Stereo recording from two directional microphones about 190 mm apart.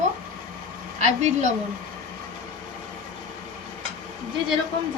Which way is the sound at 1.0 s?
40° right (ahead or behind).